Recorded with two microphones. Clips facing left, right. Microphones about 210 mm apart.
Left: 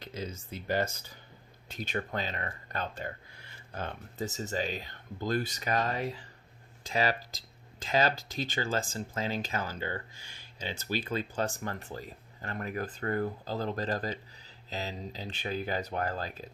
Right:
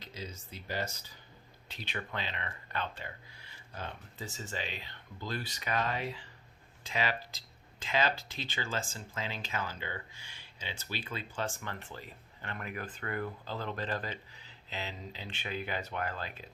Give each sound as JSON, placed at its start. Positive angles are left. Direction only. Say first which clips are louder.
{"t": 0.0, "sound": "speech", "louder": "left 6 dB", "side_deg": 50}